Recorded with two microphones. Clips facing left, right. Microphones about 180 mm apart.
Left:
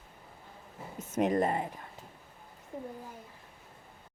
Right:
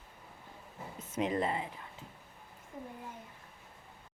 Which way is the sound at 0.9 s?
45° left (ahead or behind).